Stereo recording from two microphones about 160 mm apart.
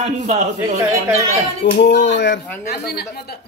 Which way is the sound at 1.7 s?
90° left.